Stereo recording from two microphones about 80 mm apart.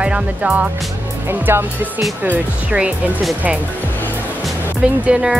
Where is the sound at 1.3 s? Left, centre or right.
Right.